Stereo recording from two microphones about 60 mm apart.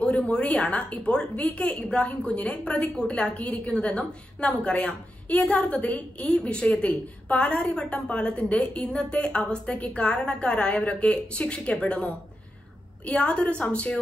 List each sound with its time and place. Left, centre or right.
0.0 s a woman's voice: centre